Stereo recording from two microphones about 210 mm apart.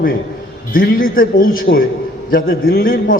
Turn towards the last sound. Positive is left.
turn(degrees=45)  # may be behind; listen again after turning